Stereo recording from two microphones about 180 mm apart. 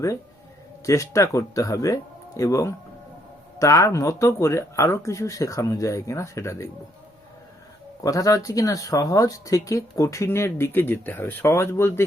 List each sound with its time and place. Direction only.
0.9 s speech: 15° left (ahead or behind)
8.0 s speech: 20° left (ahead or behind)